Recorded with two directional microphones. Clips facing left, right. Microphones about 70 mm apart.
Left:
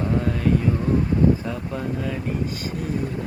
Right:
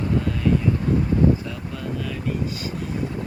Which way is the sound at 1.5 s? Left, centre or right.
Left.